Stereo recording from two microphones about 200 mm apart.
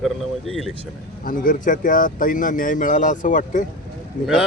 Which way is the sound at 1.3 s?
40° left (ahead or behind).